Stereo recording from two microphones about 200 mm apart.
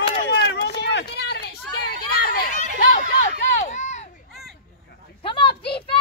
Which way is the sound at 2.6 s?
40° left (ahead or behind).